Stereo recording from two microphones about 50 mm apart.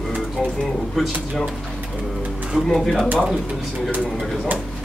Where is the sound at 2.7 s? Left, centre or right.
Centre.